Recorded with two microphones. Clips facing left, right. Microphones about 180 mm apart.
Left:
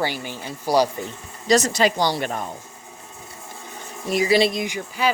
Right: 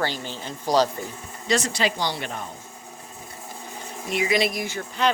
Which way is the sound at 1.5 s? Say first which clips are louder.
Left 5 dB; 40° left (ahead or behind).